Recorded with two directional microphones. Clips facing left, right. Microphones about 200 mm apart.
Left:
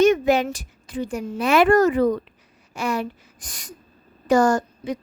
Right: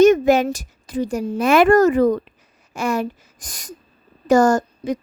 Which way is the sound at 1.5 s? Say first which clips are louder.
Right 3 dB; 50° right (ahead or behind).